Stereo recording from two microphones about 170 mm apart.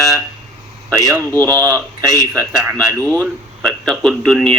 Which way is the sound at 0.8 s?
20° right (ahead or behind).